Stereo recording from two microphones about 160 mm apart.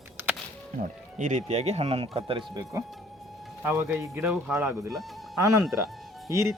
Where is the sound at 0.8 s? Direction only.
50° right (ahead or behind); by 5.1 s 5° right (ahead or behind).